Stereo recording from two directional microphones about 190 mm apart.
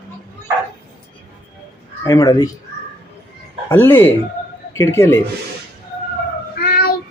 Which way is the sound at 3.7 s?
10° left (ahead or behind).